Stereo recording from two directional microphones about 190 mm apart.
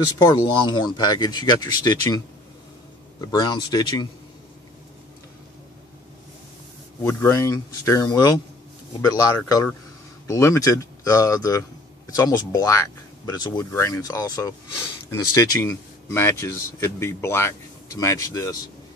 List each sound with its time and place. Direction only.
0.2 s speech: 20° left (ahead or behind)
7.0 s speech: 15° left (ahead or behind)